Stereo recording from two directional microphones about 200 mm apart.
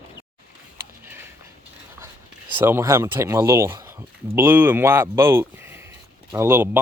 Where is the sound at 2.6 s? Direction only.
10° right (ahead or behind).